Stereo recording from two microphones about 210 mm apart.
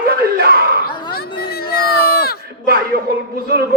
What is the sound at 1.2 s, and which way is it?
Speech, 45° left (ahead or behind).